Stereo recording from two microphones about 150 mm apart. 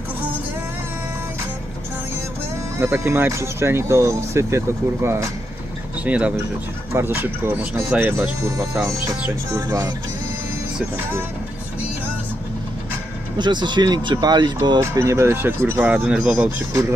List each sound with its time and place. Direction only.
2.8 s speech: 15° right (ahead or behind)
13.4 s speech: 30° right (ahead or behind); by 16.4 s 5° right (ahead or behind)